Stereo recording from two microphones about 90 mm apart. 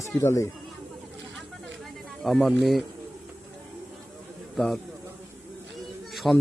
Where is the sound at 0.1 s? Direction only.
30° left (ahead or behind).